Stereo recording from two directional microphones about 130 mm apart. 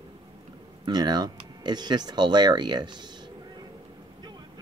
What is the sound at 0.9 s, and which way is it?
Speech, 30° right (ahead or behind).